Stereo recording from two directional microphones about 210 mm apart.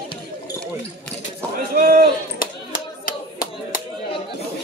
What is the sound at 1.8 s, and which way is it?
Chop, 50° right (ahead or behind).